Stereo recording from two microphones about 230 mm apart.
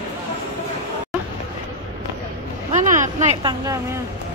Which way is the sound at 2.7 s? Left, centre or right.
Right.